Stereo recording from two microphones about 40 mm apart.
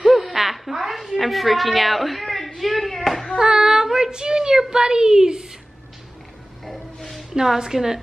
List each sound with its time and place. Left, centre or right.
0.1 s a sound: centre
3.3 s child singing: centre
6.6 s train: centre
7.3 s child singing: centre